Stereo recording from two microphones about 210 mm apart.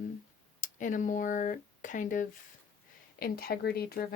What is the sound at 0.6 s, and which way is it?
Speech, 40° left (ahead or behind).